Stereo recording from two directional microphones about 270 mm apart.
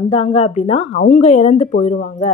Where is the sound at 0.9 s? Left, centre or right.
Left.